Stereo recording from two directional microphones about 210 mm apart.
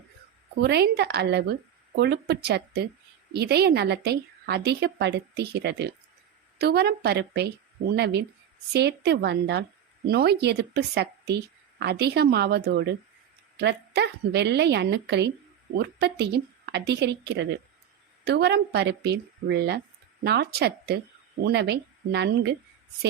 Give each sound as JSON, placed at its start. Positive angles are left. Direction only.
{"t": 0.6, "sound": "speech", "side_deg": -50}